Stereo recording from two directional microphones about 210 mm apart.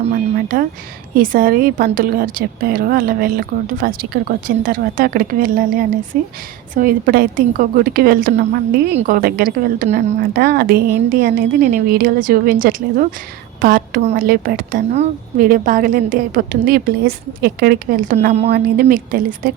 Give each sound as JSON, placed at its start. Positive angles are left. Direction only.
{"t": 0.4, "sound": "a woman's voice", "side_deg": -40}